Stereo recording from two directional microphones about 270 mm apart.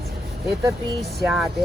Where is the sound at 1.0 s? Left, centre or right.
Centre.